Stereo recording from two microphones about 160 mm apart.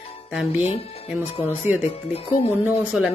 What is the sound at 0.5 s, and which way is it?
Speech, 40° left (ahead or behind).